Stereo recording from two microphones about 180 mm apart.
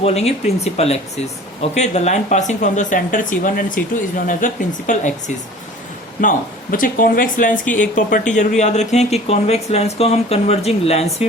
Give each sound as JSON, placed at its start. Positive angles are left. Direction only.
{"t": 0.0, "sound": "speech", "side_deg": 35}
{"t": 6.2, "sound": "speech", "side_deg": 50}